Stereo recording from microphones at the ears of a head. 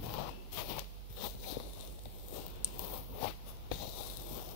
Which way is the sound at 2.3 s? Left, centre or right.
Left.